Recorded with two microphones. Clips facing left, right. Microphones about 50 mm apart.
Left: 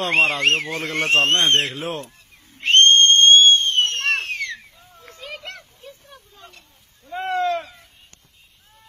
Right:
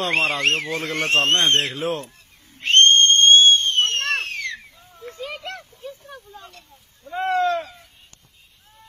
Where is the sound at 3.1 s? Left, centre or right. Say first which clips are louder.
Left 1 dB; left.